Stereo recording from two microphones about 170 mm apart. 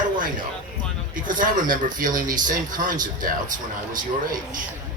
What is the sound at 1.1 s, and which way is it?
A man's voice, 50° right (ahead or behind).